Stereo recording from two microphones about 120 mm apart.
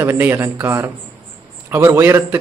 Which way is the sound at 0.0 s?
20° right (ahead or behind).